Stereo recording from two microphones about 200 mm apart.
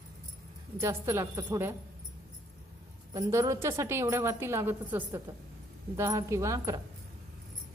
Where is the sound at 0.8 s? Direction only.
15° right (ahead or behind).